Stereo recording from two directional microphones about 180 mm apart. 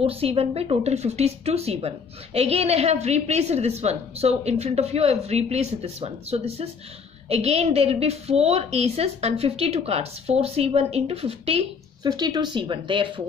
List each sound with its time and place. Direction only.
0.0 s a woman's voice: 30° right (ahead or behind)
12.1 s speech: 20° right (ahead or behind)